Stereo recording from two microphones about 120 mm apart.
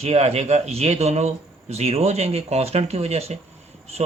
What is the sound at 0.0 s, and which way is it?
A man's voice, 60° right (ahead or behind).